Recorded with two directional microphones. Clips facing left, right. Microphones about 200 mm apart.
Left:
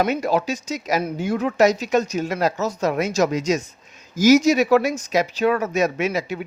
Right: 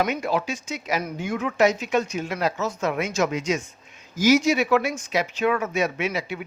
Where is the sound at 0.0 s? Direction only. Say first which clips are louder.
Left 4 dB; 40° left (ahead or behind).